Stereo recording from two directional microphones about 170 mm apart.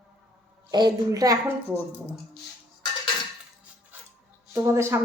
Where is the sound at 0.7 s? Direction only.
25° right (ahead or behind).